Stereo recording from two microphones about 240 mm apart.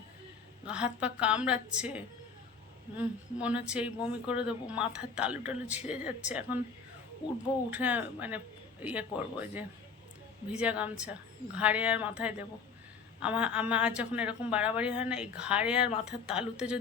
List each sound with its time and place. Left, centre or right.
0.6 s a woman's voice: centre
7.7 s a woman's voice: centre